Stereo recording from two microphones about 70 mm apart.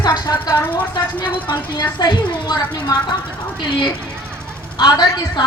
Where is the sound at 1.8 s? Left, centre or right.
Left.